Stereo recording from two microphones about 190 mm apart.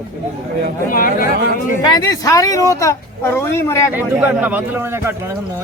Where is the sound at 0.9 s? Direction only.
50° left (ahead or behind).